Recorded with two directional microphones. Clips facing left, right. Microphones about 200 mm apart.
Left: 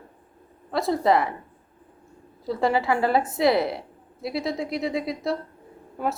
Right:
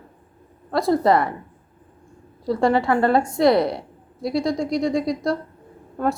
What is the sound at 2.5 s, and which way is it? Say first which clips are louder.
A woman's voice: right 4 dB; centre (ahead or behind).